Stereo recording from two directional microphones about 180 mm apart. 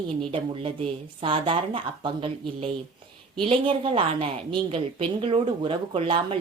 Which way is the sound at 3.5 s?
30° right (ahead or behind).